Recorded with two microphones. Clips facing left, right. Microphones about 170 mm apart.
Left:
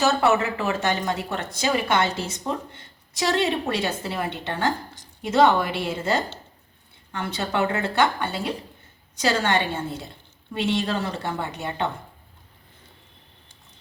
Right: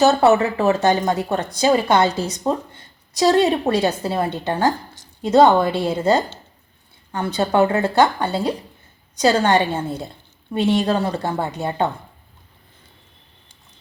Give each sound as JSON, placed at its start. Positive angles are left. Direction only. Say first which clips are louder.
{"t": 0.0, "sound": "speech", "louder": "right 6 dB", "side_deg": -35}